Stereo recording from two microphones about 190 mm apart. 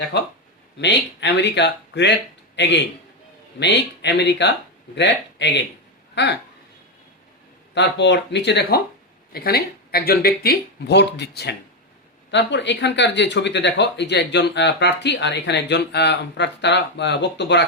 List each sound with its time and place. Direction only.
0.1 s speech: 60° left (ahead or behind)
7.7 s speech: 65° left (ahead or behind)